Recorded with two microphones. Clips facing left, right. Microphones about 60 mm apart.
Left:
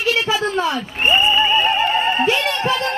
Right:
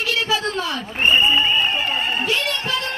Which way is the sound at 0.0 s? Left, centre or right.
Centre.